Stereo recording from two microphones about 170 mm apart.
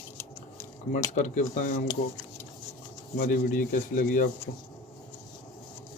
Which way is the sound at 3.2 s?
50° left (ahead or behind).